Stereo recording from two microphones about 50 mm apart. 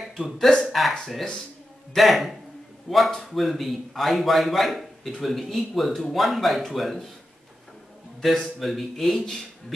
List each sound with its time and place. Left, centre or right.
0.2 s a man's voice: centre
2.0 s a man's voice: centre
8.2 s a man's voice: centre